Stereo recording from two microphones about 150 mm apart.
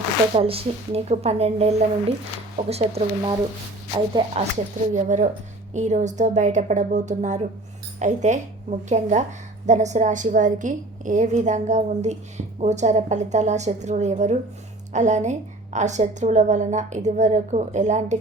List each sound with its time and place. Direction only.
0.3 s a woman's voice: 40° right (ahead or behind)
4.9 s a woman's voice: 55° right (ahead or behind)